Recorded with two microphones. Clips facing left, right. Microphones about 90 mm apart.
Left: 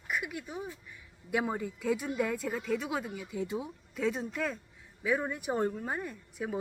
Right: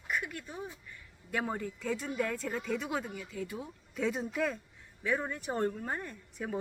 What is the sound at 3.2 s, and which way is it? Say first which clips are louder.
Speech: left 4 dB; 20° left (ahead or behind).